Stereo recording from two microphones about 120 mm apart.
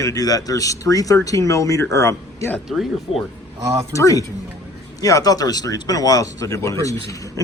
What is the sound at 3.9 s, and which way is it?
Speech, 30° left (ahead or behind).